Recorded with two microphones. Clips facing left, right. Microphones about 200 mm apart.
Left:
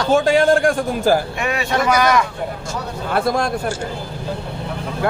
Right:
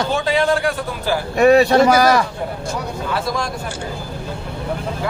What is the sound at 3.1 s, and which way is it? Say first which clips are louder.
Speech: left 6 dB; 55° left (ahead or behind).